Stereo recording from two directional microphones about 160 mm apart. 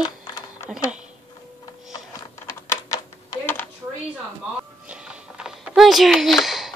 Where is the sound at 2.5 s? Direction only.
20° left (ahead or behind).